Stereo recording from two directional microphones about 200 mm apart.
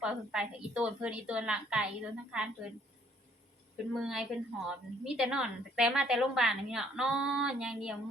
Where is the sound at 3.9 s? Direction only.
5° right (ahead or behind).